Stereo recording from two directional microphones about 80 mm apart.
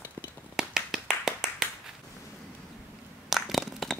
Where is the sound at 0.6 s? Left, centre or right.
Centre.